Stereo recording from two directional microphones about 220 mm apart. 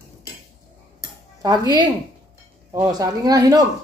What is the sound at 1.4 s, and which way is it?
Speech, 15° right (ahead or behind).